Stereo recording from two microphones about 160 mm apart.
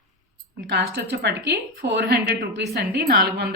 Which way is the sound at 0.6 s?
90° right.